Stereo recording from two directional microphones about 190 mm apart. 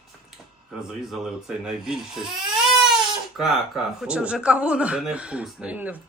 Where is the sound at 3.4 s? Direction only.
Centre (ahead or behind).